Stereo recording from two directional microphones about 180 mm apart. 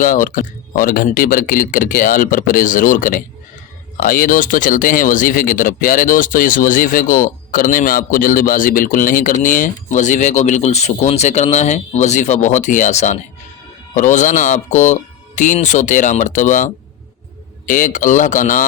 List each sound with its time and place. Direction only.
0.0 s speech: 50° left (ahead or behind)